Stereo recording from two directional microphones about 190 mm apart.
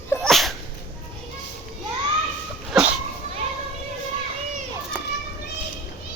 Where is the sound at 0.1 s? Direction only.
Centre (ahead or behind).